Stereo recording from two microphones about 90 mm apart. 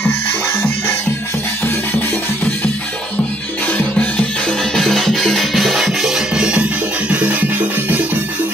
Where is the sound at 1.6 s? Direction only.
25° left (ahead or behind).